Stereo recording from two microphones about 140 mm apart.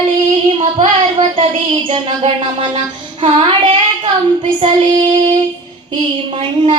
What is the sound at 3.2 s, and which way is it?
Speech, 40° right (ahead or behind).